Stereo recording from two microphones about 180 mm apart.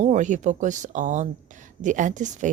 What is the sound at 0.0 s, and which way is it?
Speech, 45° right (ahead or behind).